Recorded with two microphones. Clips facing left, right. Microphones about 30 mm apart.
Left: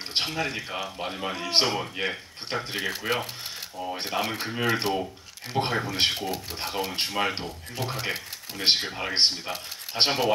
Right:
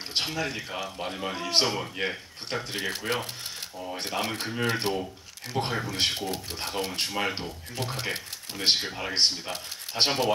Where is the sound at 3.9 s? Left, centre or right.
Left.